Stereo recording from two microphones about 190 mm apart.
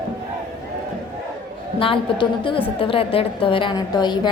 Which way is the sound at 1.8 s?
25° left (ahead or behind).